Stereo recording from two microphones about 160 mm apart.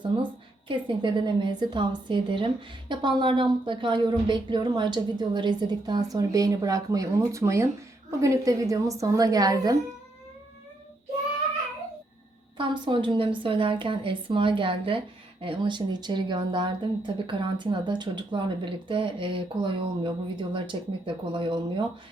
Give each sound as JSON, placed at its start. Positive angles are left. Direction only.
{"t": 0.1, "sound": "a woman's voice", "side_deg": -30}
{"t": 12.5, "sound": "a woman's voice", "side_deg": -30}